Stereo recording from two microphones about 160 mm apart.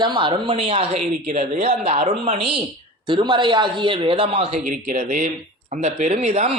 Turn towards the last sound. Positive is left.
turn(degrees=-40)  # may be behind; listen again after turning